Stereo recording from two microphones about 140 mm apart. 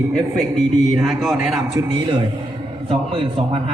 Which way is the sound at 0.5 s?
Centre (ahead or behind).